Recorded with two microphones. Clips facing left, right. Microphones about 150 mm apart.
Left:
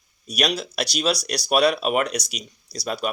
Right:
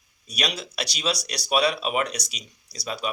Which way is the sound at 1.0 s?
40° left (ahead or behind).